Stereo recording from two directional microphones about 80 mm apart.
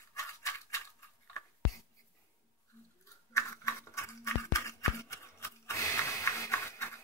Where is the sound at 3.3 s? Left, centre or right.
Left.